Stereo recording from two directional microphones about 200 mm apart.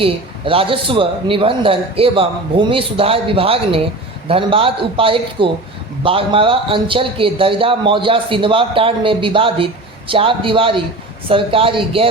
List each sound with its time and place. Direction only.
0.0 s a man's voice: 25° right (ahead or behind)